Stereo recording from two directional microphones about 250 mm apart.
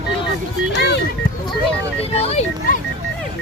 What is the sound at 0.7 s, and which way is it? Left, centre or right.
Music, left.